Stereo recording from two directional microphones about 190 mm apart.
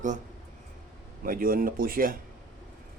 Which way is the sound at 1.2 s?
50° right (ahead or behind).